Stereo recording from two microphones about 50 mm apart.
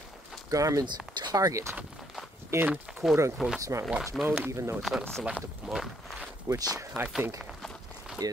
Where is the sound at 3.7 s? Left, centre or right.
Right.